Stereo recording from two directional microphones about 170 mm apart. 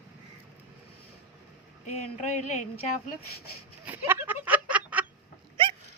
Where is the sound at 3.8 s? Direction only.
10° right (ahead or behind).